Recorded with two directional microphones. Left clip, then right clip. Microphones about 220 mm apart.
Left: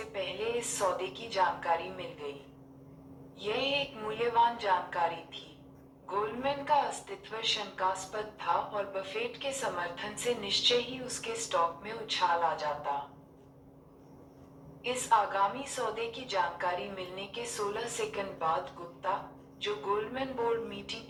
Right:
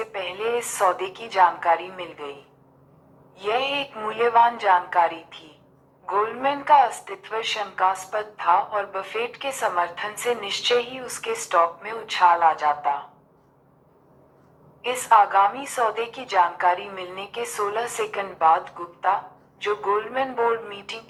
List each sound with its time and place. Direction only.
0.0 s a woman's voice: 20° right (ahead or behind)
3.3 s a woman's voice: 25° right (ahead or behind)
14.8 s a woman's voice: 25° right (ahead or behind)